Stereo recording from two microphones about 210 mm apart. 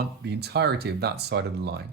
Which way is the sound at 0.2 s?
50° right (ahead or behind).